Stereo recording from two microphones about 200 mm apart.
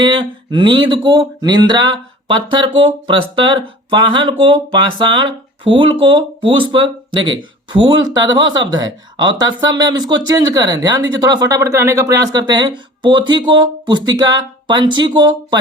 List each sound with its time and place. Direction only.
0.0 s speech: 25° right (ahead or behind)